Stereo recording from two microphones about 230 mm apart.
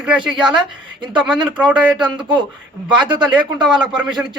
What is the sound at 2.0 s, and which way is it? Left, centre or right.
Speech, centre.